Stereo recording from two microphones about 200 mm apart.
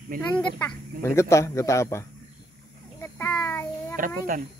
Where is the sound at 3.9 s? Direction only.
40° right (ahead or behind).